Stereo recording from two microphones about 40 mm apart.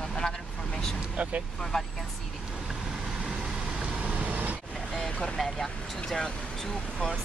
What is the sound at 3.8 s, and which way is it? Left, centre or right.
Vehicle, right.